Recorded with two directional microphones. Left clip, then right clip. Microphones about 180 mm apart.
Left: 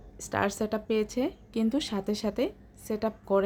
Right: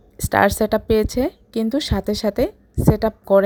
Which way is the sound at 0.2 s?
40° right (ahead or behind).